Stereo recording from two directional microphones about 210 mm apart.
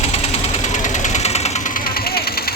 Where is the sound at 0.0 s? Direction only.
30° left (ahead or behind).